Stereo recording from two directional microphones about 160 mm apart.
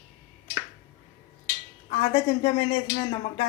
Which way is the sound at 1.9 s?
40° left (ahead or behind).